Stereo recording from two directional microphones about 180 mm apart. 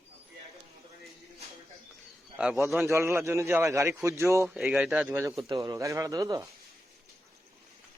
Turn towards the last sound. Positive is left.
turn(degrees=-20)  # may be behind; listen again after turning